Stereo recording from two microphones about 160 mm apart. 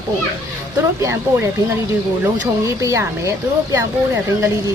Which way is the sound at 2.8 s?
20° right (ahead or behind).